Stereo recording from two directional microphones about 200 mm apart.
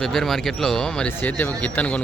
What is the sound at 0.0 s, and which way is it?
Speech, centre (ahead or behind).